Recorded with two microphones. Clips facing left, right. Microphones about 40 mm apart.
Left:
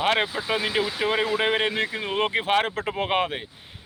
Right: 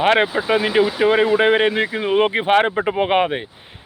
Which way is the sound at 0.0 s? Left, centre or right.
Right.